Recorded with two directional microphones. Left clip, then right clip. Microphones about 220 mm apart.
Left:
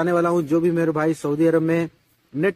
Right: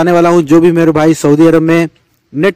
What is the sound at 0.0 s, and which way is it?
Speech, 45° right (ahead or behind).